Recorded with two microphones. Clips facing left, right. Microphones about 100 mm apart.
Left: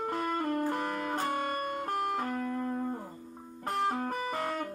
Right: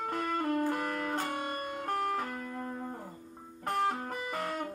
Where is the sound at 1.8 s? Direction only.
10° left (ahead or behind).